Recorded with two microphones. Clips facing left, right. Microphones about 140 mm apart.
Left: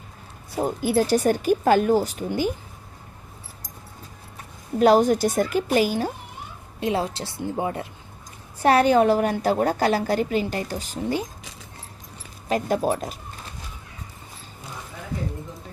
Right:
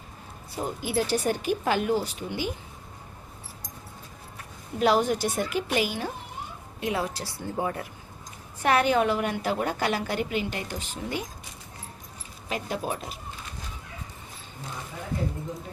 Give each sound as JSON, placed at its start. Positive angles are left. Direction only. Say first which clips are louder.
{"t": 0.5, "sound": "a woman's voice", "louder": "left 6 dB", "side_deg": 45}
{"t": 4.8, "sound": "a woman's voice", "louder": "left 6 dB", "side_deg": 40}
{"t": 6.7, "sound": "a woman's voice", "louder": "left 4 dB", "side_deg": 30}
{"t": 8.6, "sound": "a woman's voice", "louder": "left 6 dB", "side_deg": 35}
{"t": 12.5, "sound": "a woman's voice", "louder": "left 8 dB", "side_deg": 45}